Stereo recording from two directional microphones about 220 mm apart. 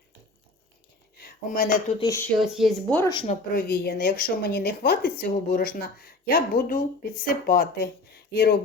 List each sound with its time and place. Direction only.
1.2 s speech: 35° left (ahead or behind)
2.0 s speech: 15° left (ahead or behind)
2.4 s speech: centre (ahead or behind)
3.0 s speech: 20° left (ahead or behind)
3.2 s a woman's voice: 40° left (ahead or behind)